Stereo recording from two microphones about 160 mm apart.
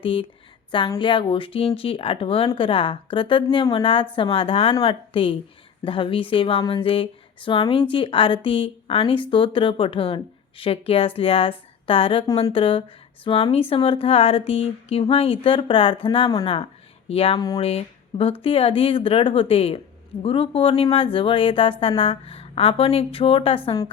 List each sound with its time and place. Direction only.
0.0 s speech: 35° left (ahead or behind)